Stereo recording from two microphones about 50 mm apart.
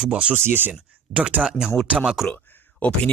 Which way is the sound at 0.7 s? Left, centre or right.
Right.